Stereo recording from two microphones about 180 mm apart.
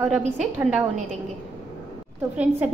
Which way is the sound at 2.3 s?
5° right (ahead or behind).